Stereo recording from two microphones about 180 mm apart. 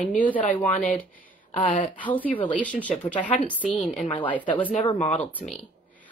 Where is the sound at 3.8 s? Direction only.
40° left (ahead or behind).